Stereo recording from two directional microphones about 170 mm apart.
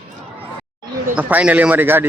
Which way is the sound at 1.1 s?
10° right (ahead or behind).